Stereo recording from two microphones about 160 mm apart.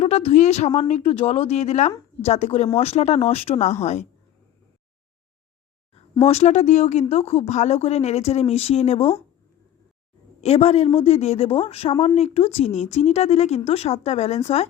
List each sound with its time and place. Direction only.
0.0 s a woman's voice: 40° left (ahead or behind)
6.2 s a woman's voice: 40° left (ahead or behind)
10.4 s a woman's voice: 40° left (ahead or behind)